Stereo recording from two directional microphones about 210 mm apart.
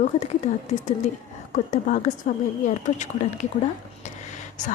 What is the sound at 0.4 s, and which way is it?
A woman's voice, 35° left (ahead or behind).